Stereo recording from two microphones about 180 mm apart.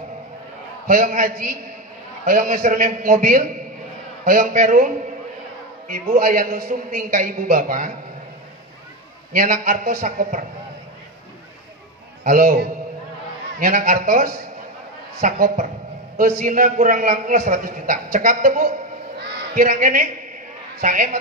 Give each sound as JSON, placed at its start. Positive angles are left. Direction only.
{"t": 0.8, "sound": "a man's voice", "side_deg": -50}
{"t": 9.3, "sound": "a man's voice", "side_deg": -50}
{"t": 12.3, "sound": "a man's voice", "side_deg": -50}